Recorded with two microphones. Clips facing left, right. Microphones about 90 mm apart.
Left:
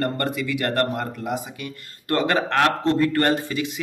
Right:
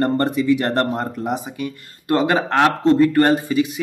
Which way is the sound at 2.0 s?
20° right (ahead or behind).